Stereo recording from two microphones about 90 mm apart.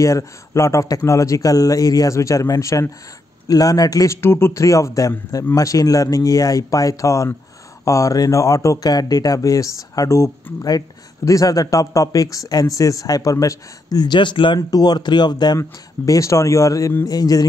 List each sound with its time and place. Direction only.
0.0 s a man's voice: 35° left (ahead or behind)
4.2 s speech: 25° left (ahead or behind); by 14.6 s 65° left (ahead or behind)
14.7 s a man's voice: 50° left (ahead or behind)
16.1 s a man's voice: 35° left (ahead or behind)